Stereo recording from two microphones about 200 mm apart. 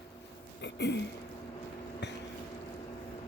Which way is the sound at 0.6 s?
60° left (ahead or behind).